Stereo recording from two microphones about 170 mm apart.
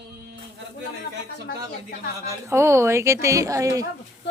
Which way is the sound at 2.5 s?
15° right (ahead or behind).